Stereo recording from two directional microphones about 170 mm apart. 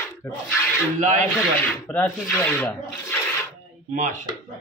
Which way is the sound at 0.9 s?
45° right (ahead or behind).